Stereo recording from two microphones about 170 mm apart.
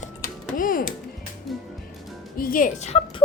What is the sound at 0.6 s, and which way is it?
Speech, 55° left (ahead or behind).